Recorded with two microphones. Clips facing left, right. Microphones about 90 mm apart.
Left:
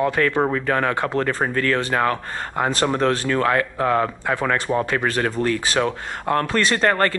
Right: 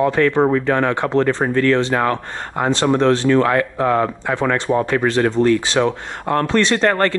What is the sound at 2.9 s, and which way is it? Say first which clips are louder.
Speech: right 6 dB; centre (ahead or behind).